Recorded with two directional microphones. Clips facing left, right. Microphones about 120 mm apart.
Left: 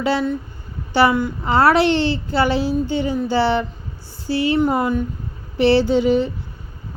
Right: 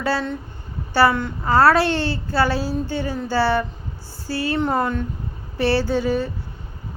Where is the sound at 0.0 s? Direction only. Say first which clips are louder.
Left 4 dB; 15° left (ahead or behind).